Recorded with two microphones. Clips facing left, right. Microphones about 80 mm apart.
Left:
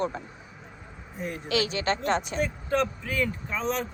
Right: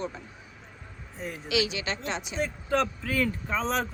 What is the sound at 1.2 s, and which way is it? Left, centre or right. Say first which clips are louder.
Speech: left 3 dB; centre.